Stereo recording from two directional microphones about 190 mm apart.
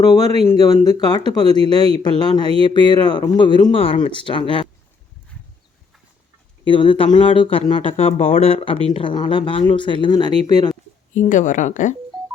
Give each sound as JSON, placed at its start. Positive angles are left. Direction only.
{"t": 0.2, "sound": "speech", "side_deg": -35}
{"t": 0.4, "sound": "speech", "side_deg": 20}
{"t": 6.7, "sound": "speech", "side_deg": 25}
{"t": 11.1, "sound": "speech", "side_deg": 40}